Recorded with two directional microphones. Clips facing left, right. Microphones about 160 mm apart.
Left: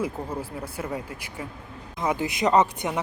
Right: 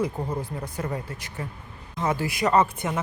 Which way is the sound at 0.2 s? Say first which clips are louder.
Right 2 dB; 10° right (ahead or behind).